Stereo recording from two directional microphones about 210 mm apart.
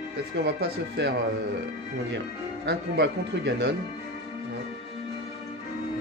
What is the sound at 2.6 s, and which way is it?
Speech, 55° right (ahead or behind).